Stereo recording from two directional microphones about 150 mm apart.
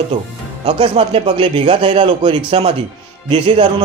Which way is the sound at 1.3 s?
30° right (ahead or behind).